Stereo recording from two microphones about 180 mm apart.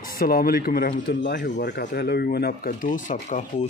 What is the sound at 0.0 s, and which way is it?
Speech, 55° left (ahead or behind).